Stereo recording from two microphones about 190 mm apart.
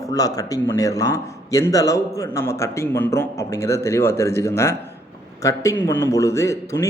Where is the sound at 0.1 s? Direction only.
20° left (ahead or behind).